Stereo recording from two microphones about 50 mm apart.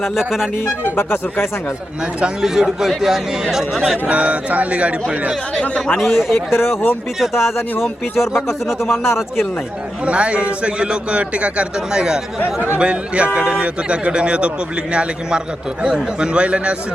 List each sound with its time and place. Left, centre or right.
0.0 s a man's voice: centre
0.9 s speech: left
2.2 s a man's voice: centre
4.0 s a man's voice: right
5.5 s speech: centre
6.0 s speech: centre
6.5 s speech: left
10.1 s a man's voice: right
15.8 s a man's voice: centre